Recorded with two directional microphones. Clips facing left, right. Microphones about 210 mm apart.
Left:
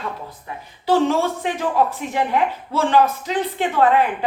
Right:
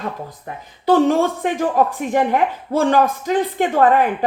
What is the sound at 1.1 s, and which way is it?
A woman's voice, 50° right (ahead or behind).